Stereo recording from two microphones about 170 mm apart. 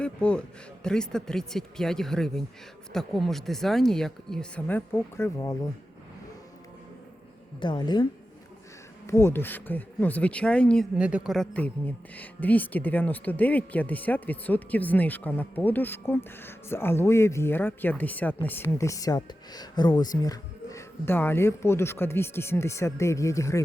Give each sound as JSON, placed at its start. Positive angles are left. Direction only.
{"t": 0.0, "sound": "a man's voice", "side_deg": 5}
{"t": 7.6, "sound": "a woman's voice", "side_deg": 25}
{"t": 9.0, "sound": "a woman's voice", "side_deg": 15}
{"t": 10.9, "sound": "a woman's voice", "side_deg": -5}